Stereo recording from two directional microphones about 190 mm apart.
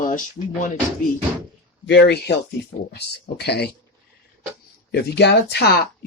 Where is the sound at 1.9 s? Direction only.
65° left (ahead or behind).